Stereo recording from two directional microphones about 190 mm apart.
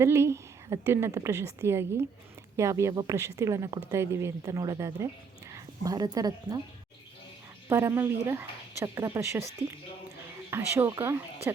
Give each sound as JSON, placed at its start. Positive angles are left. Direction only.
{"t": 0.0, "sound": "a woman's voice", "side_deg": -15}
{"t": 7.7, "sound": "a woman's voice", "side_deg": -15}
{"t": 10.5, "sound": "a woman's voice", "side_deg": -15}